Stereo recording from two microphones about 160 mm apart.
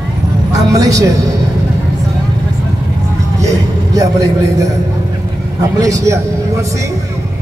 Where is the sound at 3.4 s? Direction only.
20° right (ahead or behind).